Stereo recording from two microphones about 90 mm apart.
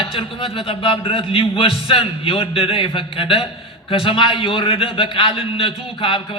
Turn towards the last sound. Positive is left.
turn(degrees=75)  # may be behind; listen again after turning